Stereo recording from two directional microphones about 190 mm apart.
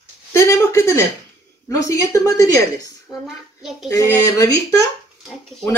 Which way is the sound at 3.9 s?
15° left (ahead or behind).